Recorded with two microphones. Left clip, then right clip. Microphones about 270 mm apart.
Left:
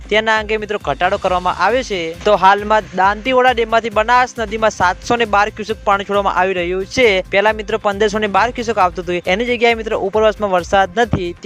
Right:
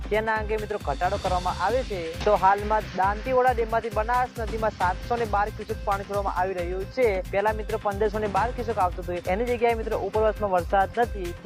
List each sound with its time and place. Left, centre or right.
0.1 s speech: left